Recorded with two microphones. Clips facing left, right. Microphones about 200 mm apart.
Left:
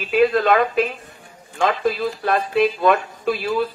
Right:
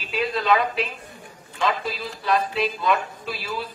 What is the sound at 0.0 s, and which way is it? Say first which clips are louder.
Speech: left 9 dB; 55° left (ahead or behind).